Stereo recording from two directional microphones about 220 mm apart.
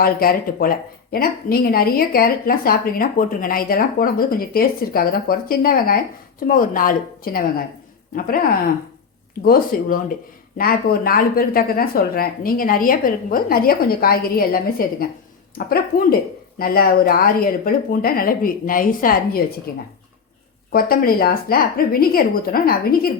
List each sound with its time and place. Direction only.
0.0 s a woman's voice: 40° left (ahead or behind)
9.4 s a woman's voice: 40° left (ahead or behind)